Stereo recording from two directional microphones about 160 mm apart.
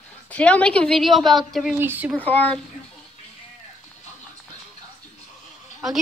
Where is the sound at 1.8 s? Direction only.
15° right (ahead or behind).